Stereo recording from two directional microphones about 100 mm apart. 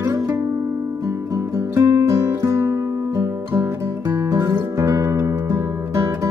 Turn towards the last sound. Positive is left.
turn(degrees=-30)  # may be behind; listen again after turning